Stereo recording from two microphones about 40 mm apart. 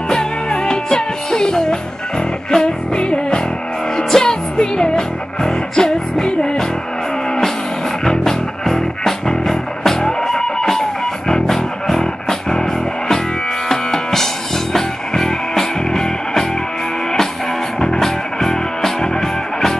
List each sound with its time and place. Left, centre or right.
0.1 s music: centre
8.0 s music: centre
13.7 s music: centre
17.7 s music: centre